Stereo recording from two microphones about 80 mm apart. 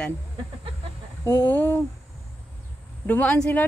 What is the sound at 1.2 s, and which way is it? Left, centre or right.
Speech, left.